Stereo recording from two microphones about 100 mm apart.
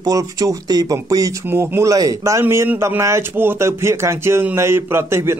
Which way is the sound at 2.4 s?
25° right (ahead or behind).